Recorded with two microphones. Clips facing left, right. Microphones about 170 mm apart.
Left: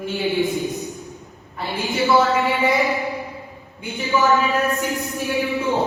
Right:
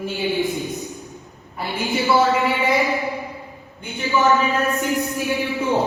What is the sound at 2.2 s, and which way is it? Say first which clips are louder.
A woman's voice: even; centre (ahead or behind).